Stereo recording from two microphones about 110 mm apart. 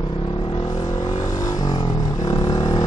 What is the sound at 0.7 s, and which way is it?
Vehicle, 35° left (ahead or behind).